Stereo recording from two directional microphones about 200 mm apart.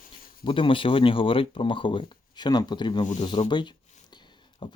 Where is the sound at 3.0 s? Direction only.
35° left (ahead or behind).